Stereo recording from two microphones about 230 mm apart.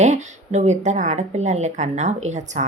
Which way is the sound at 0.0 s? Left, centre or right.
Right.